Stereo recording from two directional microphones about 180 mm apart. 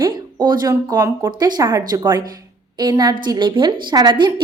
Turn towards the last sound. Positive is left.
turn(degrees=-25)  # may be behind; listen again after turning